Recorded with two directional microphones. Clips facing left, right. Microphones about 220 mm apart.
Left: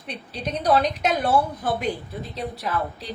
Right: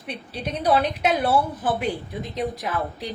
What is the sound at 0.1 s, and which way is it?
A woman's voice, 5° right (ahead or behind).